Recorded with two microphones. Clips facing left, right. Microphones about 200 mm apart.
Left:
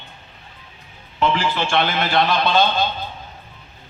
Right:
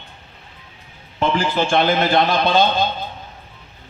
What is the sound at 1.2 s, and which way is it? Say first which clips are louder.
A man's voice: right 1 dB; 45° right (ahead or behind).